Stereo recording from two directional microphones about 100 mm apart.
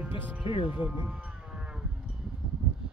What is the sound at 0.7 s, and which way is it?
Livestock, 15° right (ahead or behind).